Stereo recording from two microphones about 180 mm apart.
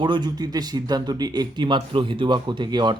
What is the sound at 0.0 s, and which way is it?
Speech, 25° right (ahead or behind).